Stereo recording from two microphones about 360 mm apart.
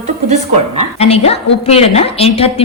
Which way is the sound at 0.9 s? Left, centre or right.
Centre.